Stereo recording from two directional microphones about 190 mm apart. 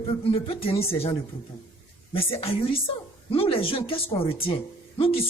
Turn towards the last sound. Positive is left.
turn(degrees=30)  # may be behind; listen again after turning